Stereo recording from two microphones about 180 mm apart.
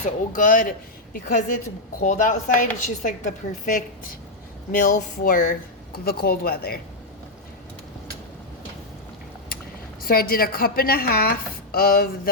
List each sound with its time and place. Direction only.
0.3 s a woman's voice: 45° left (ahead or behind)
10.0 s a woman's voice: 55° left (ahead or behind)